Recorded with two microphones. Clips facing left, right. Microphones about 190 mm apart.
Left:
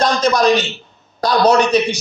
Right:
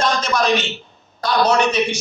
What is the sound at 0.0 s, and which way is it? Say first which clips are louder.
A man's voice: left 5 dB; 35° left (ahead or behind).